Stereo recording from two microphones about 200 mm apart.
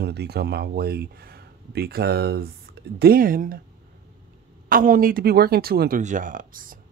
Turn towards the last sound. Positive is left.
turn(degrees=-45)  # may be behind; listen again after turning